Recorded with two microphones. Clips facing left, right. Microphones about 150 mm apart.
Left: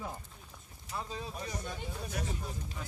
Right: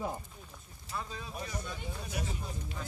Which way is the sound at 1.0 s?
25° left (ahead or behind).